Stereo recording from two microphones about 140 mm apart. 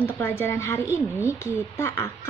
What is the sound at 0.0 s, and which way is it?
A woman's voice, 15° left (ahead or behind).